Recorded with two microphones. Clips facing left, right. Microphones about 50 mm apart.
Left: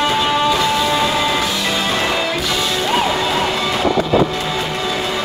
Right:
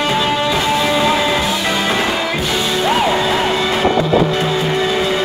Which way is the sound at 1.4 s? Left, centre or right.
Right.